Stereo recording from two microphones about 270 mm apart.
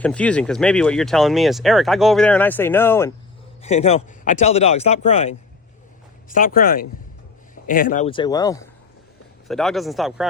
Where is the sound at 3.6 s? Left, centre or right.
Left.